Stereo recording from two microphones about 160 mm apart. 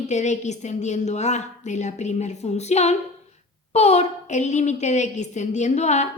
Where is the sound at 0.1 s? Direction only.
45° left (ahead or behind).